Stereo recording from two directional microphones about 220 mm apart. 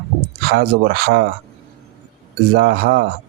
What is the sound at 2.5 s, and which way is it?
Speech, 45° right (ahead or behind).